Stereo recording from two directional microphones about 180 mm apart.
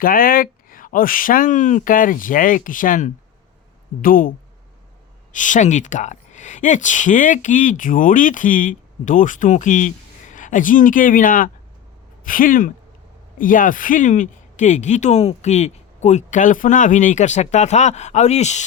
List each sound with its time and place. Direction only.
0.0 s speech: 55° left (ahead or behind)